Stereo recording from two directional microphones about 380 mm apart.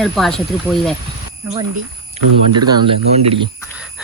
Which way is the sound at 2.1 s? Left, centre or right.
Right.